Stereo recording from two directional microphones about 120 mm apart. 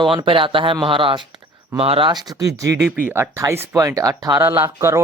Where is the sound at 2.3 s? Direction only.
30° right (ahead or behind).